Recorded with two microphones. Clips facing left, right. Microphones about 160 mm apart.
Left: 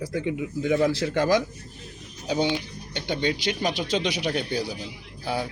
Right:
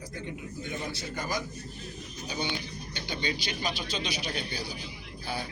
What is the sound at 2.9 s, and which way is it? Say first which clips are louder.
Speech: left 8 dB; 70° left (ahead or behind).